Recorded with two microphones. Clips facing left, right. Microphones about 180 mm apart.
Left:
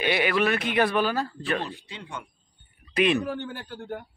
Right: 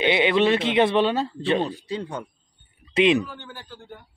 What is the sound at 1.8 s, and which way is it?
Speech, 40° right (ahead or behind).